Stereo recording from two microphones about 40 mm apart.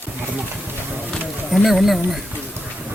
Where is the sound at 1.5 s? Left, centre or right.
Centre.